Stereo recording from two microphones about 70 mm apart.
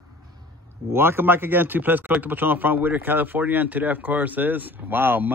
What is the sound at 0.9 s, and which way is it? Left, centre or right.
Speech, right.